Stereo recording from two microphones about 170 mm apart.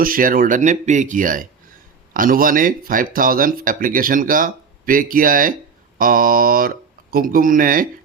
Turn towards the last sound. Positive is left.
turn(degrees=-55)  # may be behind; listen again after turning